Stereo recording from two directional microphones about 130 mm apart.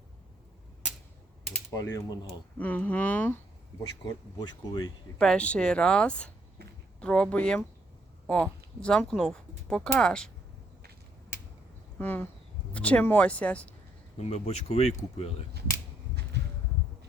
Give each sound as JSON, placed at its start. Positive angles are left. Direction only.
{"t": 1.7, "sound": "speech", "side_deg": 20}
{"t": 4.4, "sound": "speech", "side_deg": 30}
{"t": 5.1, "sound": "speech", "side_deg": 5}
{"t": 8.8, "sound": "speech", "side_deg": 5}
{"t": 11.9, "sound": "speech", "side_deg": 15}
{"t": 14.2, "sound": "speech", "side_deg": 50}